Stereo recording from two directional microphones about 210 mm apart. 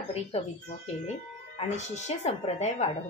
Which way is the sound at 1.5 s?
30° left (ahead or behind).